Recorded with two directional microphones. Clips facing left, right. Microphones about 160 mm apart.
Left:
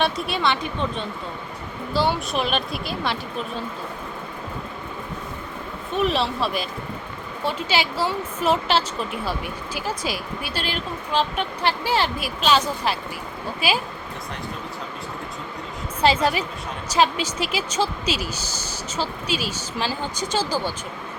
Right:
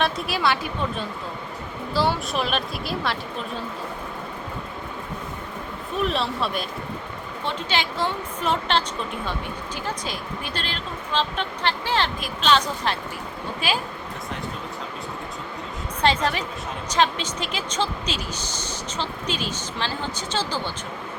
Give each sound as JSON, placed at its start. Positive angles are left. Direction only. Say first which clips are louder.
{"t": 0.0, "sound": "a woman's voice", "louder": "left 1 dB", "side_deg": 0}
{"t": 5.9, "sound": "a woman's voice", "louder": "left 3 dB", "side_deg": 0}
{"t": 16.0, "sound": "a woman's voice", "louder": "left 2 dB", "side_deg": 5}